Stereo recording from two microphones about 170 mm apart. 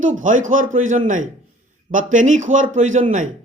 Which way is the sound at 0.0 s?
50° right (ahead or behind).